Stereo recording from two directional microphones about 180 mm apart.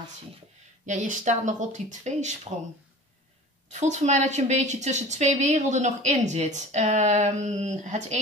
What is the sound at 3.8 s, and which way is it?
A woman's voice, 40° right (ahead or behind).